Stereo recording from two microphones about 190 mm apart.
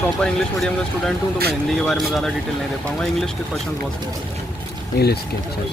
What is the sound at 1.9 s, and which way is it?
Speech, centre (ahead or behind).